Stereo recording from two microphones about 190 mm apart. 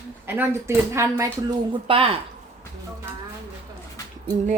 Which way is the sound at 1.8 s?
30° right (ahead or behind).